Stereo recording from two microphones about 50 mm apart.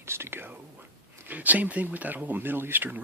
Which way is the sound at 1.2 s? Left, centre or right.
Right.